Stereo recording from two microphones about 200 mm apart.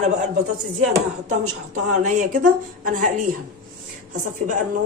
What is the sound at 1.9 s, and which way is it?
Speech, 40° right (ahead or behind).